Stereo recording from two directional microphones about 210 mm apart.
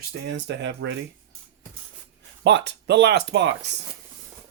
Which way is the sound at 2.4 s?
55° right (ahead or behind).